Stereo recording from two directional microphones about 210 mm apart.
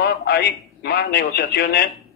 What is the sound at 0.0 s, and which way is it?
Speech, 50° left (ahead or behind).